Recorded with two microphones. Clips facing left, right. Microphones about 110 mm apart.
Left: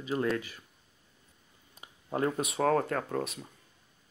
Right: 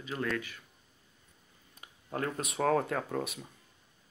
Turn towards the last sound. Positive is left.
turn(degrees=0)  # may be behind; listen again after turning